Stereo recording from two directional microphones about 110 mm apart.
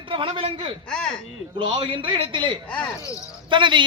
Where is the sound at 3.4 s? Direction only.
45° right (ahead or behind).